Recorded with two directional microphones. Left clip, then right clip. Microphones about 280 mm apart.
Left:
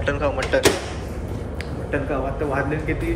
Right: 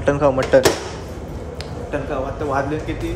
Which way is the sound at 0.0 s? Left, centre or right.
Right.